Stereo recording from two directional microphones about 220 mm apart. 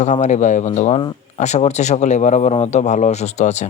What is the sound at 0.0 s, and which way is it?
A man's voice, 30° left (ahead or behind).